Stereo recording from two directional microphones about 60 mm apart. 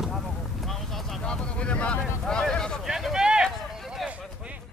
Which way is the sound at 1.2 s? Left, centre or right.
Centre.